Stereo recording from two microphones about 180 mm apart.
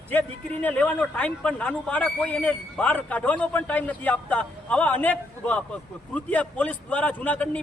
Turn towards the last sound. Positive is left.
turn(degrees=5)  # may be behind; listen again after turning